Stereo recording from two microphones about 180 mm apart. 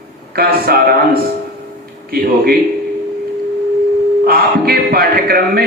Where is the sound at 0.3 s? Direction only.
60° right (ahead or behind).